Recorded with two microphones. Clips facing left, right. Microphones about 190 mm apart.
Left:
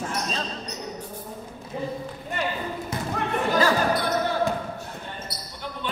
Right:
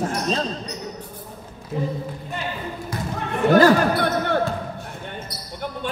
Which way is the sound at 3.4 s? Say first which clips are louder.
Right 8 dB; 65° right (ahead or behind).